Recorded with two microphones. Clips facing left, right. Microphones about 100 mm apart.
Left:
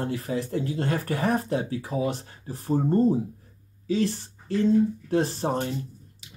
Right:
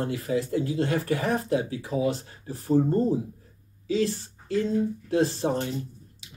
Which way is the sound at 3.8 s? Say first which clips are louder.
Even; 35° left (ahead or behind).